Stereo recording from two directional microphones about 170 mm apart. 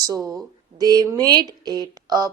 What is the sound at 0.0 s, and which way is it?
A woman's voice, 20° right (ahead or behind).